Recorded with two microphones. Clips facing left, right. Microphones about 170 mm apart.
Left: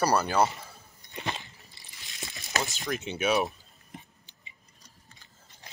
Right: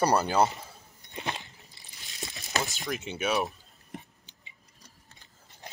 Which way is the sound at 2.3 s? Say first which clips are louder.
Even; centre (ahead or behind).